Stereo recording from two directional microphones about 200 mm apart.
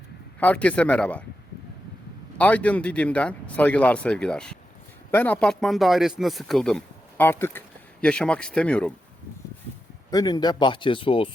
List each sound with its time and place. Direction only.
0.3 s speech: 5° left (ahead or behind)
2.4 s speech: 5° left (ahead or behind)
10.1 s speech: 20° left (ahead or behind)